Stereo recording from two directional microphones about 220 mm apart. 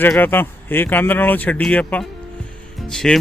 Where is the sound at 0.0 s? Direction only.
10° left (ahead or behind).